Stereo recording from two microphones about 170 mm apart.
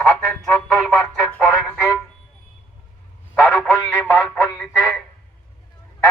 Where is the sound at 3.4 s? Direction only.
5° left (ahead or behind).